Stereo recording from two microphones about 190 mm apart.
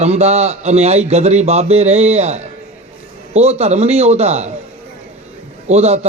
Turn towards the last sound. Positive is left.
turn(degrees=-35)  # may be behind; listen again after turning